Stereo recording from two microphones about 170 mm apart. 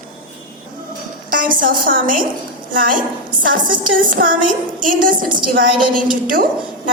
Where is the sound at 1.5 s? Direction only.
55° right (ahead or behind).